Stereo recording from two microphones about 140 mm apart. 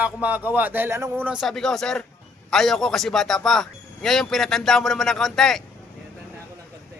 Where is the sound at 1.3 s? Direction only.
Centre (ahead or behind).